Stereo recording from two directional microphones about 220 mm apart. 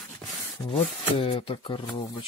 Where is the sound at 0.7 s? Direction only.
25° left (ahead or behind).